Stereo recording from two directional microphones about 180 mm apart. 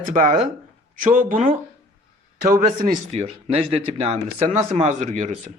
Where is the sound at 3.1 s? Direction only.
35° right (ahead or behind).